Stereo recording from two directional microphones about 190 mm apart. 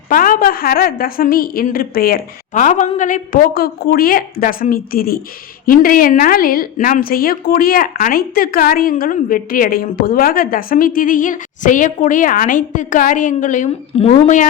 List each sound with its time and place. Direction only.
0.1 s a woman's voice: 45° left (ahead or behind)